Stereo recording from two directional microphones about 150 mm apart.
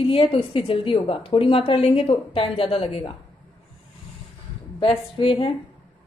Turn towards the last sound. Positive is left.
turn(degrees=35)  # may be behind; listen again after turning